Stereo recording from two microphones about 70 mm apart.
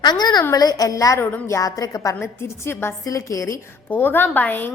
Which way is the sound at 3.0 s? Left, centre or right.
Left.